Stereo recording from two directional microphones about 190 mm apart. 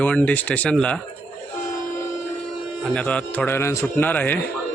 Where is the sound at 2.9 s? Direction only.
5° left (ahead or behind).